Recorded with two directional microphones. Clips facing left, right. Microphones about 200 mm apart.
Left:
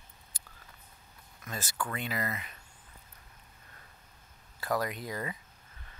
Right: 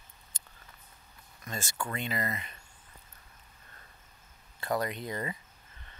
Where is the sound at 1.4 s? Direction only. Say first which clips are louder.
Even; 5° left (ahead or behind).